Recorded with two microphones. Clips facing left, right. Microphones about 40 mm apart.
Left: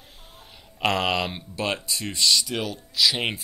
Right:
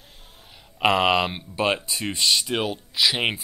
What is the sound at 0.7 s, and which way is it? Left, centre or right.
Speech, centre.